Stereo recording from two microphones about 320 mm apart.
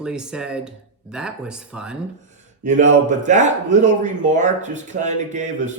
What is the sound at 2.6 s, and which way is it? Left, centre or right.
A man's voice, right.